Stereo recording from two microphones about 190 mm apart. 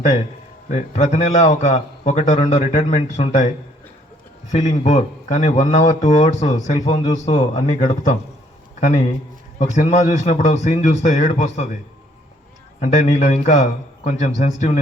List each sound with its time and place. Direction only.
0.7 s speech: 40° left (ahead or behind)
4.5 s speech: 35° left (ahead or behind)
9.6 s speech: 40° left (ahead or behind)
12.8 s speech: 40° left (ahead or behind)